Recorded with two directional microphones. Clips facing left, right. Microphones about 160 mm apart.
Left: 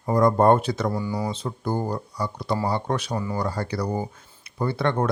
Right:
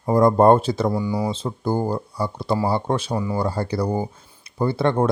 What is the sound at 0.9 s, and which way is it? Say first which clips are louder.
Speech: right 4 dB; 15° right (ahead or behind).